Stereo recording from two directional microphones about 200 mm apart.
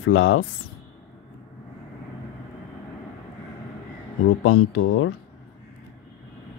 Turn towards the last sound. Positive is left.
turn(degrees=90)